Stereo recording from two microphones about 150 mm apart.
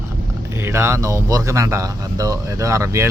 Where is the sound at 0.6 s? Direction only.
15° right (ahead or behind).